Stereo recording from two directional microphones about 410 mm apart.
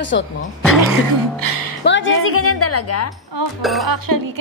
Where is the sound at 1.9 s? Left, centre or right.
Left.